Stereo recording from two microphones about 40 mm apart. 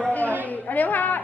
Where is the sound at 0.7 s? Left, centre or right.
Left.